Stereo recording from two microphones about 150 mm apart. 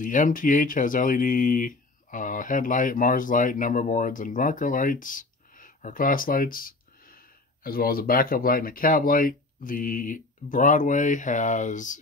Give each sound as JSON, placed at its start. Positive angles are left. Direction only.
{"t": 0.0, "sound": "speech", "side_deg": 60}